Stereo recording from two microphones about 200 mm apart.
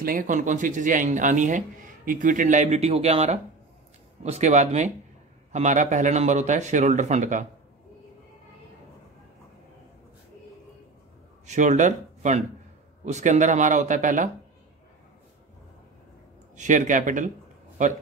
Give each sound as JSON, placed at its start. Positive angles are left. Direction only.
{"t": 0.0, "sound": "speech", "side_deg": -45}
{"t": 11.4, "sound": "speech", "side_deg": -35}
{"t": 16.5, "sound": "speech", "side_deg": -40}